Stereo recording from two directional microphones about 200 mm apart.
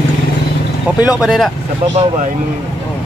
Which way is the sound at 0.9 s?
5° right (ahead or behind).